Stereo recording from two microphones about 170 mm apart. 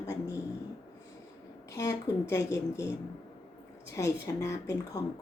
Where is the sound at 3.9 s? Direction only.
15° left (ahead or behind).